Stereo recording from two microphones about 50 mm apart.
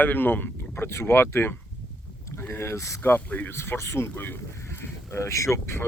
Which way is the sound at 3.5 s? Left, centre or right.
Left.